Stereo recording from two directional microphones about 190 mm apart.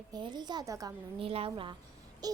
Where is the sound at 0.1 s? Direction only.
25° right (ahead or behind).